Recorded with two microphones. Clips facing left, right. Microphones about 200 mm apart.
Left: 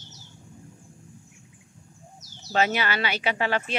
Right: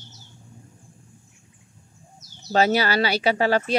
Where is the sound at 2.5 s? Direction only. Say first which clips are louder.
Right 5 dB; 35° right (ahead or behind).